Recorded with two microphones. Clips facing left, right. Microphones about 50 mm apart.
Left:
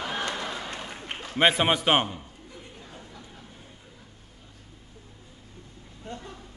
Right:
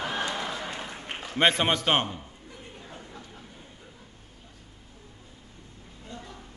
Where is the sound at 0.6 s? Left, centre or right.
Centre.